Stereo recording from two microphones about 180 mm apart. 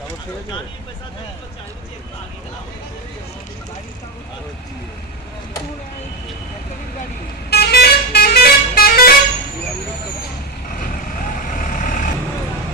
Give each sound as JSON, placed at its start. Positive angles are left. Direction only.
{"t": 7.5, "sound": "vehicle", "side_deg": 60}
{"t": 11.5, "sound": "vehicle", "side_deg": 50}